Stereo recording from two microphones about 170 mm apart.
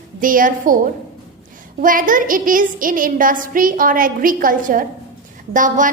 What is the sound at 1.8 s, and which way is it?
Music, 55° right (ahead or behind).